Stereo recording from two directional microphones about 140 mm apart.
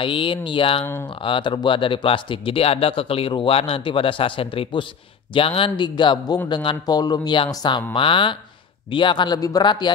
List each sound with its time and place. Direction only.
0.0 s speech: 40° left (ahead or behind)